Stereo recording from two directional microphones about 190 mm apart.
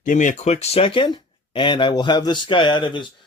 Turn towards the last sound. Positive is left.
turn(degrees=25)  # may be behind; listen again after turning